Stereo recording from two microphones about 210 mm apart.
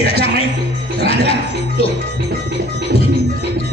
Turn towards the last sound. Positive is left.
turn(degrees=25)  # may be behind; listen again after turning